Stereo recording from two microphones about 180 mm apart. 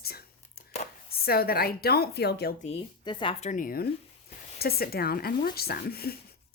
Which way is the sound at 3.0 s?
25° left (ahead or behind).